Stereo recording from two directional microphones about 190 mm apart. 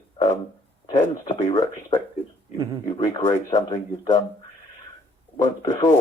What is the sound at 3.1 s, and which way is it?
Speech, 20° left (ahead or behind).